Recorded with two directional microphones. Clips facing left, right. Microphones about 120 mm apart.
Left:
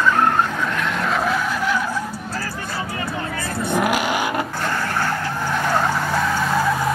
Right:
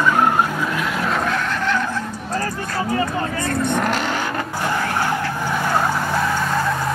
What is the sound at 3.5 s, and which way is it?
Vehicle, 5° left (ahead or behind).